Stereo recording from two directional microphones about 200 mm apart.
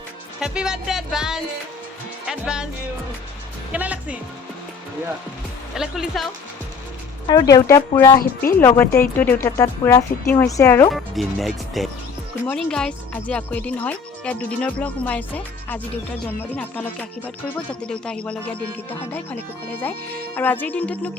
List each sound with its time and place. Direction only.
0.3 s music: 5° right (ahead or behind)
3.7 s speech: 5° right (ahead or behind)
5.7 s music: centre (ahead or behind)
7.3 s speech: 20° left (ahead or behind)
10.9 s music: centre (ahead or behind)
12.5 s speech: 5° left (ahead or behind)